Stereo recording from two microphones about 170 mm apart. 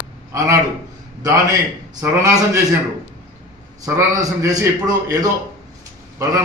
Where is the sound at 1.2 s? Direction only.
20° right (ahead or behind).